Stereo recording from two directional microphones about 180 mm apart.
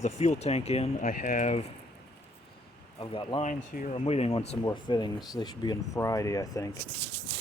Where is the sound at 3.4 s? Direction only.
40° left (ahead or behind); by 6.7 s 20° left (ahead or behind).